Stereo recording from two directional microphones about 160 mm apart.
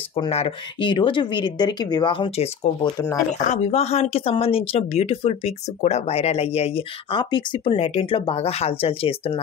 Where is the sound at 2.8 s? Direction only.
20° left (ahead or behind).